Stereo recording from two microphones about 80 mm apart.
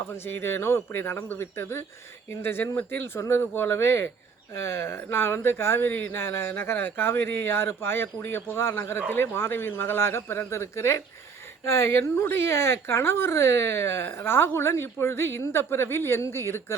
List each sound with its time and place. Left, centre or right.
0.1 s speech: left